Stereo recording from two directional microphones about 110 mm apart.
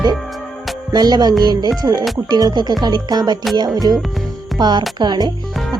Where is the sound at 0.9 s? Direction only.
35° right (ahead or behind).